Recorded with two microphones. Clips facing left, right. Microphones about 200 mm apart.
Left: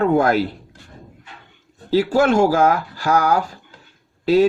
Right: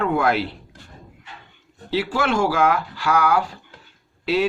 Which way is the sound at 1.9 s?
45° left (ahead or behind).